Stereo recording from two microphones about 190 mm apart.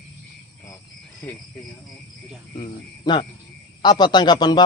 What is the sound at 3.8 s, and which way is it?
Speech, 20° left (ahead or behind).